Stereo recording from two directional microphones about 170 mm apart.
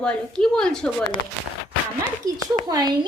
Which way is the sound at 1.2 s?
80° left.